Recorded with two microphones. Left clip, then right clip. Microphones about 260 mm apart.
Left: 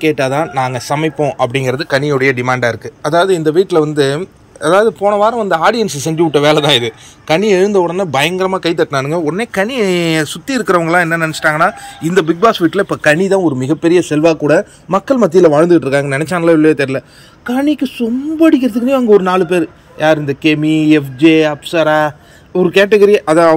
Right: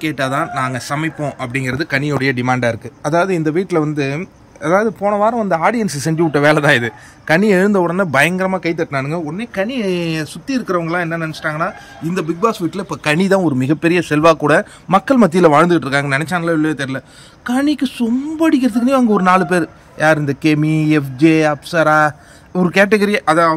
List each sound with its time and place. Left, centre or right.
0.0 s speech: centre
1.8 s speech: right
4.6 s a sound: centre
5.9 s speech: centre
9.2 s speech: centre
13.6 s speech: centre
20.8 s a sound: right
22.7 s speech: centre